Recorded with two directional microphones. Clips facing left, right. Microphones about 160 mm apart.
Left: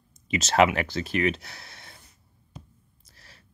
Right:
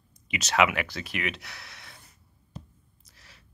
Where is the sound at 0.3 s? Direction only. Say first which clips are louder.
Left 4 dB; 30° left (ahead or behind).